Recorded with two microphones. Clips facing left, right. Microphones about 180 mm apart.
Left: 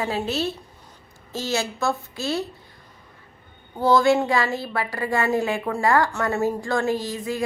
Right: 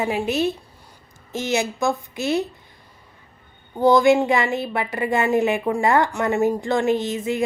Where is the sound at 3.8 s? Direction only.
15° right (ahead or behind).